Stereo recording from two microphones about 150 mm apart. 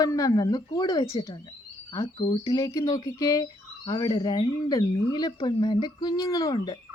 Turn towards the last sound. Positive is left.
turn(degrees=25)  # may be behind; listen again after turning